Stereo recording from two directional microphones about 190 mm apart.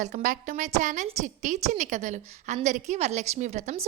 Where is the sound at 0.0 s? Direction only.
40° right (ahead or behind).